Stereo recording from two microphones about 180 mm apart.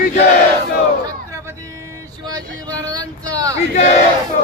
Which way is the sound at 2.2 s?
20° right (ahead or behind).